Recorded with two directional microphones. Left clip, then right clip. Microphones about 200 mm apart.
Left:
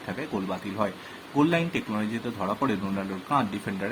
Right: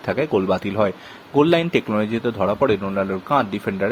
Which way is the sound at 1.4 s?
45° right (ahead or behind).